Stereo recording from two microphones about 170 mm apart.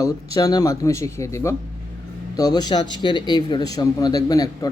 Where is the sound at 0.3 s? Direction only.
20° left (ahead or behind).